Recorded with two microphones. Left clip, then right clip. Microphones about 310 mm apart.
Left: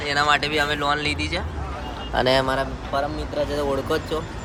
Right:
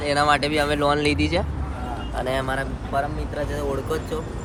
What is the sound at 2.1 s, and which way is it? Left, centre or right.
Speech, left.